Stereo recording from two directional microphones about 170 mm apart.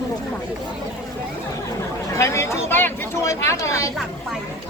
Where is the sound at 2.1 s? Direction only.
15° left (ahead or behind).